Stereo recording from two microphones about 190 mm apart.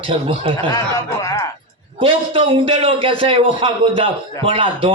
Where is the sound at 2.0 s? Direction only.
30° right (ahead or behind).